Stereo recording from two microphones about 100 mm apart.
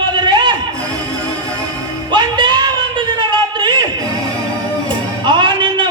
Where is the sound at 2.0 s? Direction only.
50° right (ahead or behind).